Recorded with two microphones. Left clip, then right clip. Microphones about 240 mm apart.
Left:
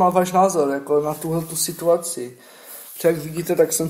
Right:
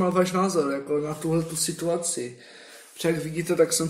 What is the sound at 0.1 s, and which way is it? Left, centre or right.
Speech, left.